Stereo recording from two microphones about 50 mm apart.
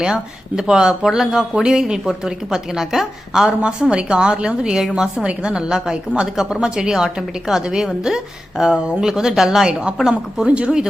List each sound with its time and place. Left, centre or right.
0.0 s speech: centre